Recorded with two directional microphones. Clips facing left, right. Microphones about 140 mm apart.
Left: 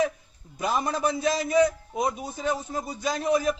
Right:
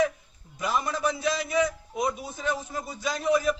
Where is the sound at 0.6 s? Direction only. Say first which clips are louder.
Left 2 dB; 35° left (ahead or behind).